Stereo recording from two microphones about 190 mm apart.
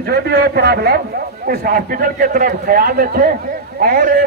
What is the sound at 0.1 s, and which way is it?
A man's voice, 55° right (ahead or behind).